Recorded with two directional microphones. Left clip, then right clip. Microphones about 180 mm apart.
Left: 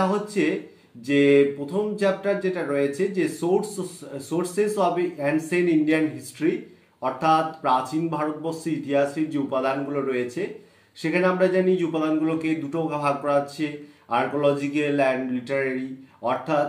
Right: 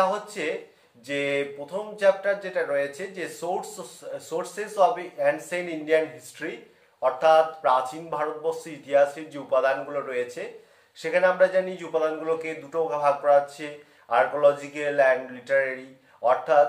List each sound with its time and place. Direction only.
0.0 s speech: 15° right (ahead or behind)